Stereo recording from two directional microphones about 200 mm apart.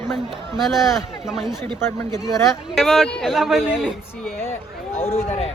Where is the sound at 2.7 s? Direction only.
Centre (ahead or behind).